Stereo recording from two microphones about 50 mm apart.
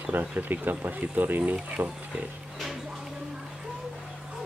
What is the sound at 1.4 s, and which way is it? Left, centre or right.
Speech, right.